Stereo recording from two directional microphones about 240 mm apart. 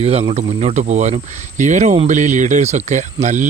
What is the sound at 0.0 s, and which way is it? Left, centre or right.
Speech, right.